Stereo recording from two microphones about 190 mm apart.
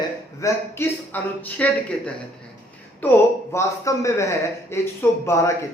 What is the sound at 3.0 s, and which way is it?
Speech, 10° left (ahead or behind).